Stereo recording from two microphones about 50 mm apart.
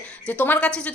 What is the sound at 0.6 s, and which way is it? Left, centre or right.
Speech, left.